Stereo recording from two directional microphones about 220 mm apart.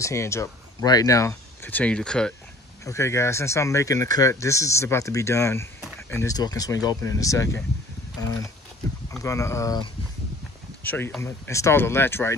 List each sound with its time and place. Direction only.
0.0 s speech: 15° left (ahead or behind)